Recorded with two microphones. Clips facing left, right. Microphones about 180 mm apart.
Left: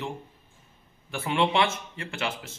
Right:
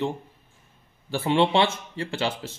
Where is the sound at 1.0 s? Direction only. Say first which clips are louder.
Right 4 dB; 30° right (ahead or behind).